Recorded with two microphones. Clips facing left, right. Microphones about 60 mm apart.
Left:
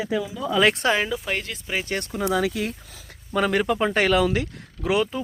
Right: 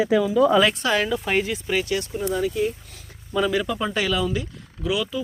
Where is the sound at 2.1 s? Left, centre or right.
Left.